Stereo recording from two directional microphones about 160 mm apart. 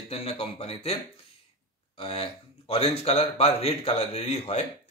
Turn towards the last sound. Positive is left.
turn(degrees=45)  # may be behind; listen again after turning